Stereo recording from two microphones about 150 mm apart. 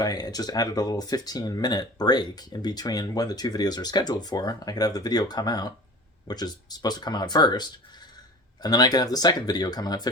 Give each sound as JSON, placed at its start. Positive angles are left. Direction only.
{"t": 0.0, "sound": "speech", "side_deg": 25}